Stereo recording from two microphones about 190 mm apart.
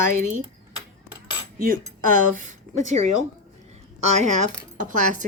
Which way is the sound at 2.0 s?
45° right (ahead or behind).